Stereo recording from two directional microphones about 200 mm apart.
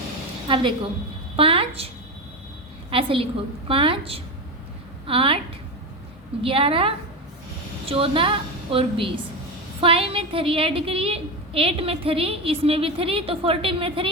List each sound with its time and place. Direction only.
0.4 s a woman's voice: 25° right (ahead or behind)
2.9 s a woman's voice: 25° right (ahead or behind)
6.4 s a woman's voice: 25° right (ahead or behind)